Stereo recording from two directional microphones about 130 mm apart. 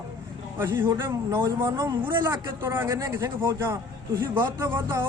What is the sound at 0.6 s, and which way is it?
A man's voice, 20° right (ahead or behind).